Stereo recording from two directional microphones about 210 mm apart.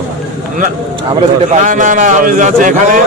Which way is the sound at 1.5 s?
35° right (ahead or behind).